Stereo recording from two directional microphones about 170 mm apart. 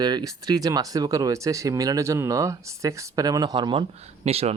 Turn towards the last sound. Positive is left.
turn(degrees=-35)  # may be behind; listen again after turning